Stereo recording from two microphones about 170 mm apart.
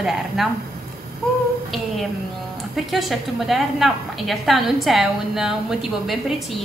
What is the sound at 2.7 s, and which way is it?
A woman's voice, centre (ahead or behind).